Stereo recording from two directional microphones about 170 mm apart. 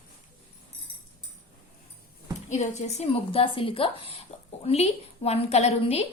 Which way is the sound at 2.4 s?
45° left (ahead or behind).